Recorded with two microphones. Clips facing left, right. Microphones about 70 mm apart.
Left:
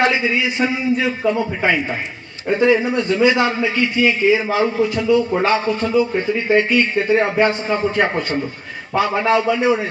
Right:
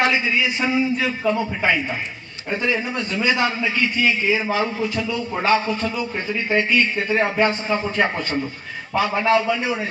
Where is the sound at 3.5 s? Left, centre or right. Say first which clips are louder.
Left 4 dB; left.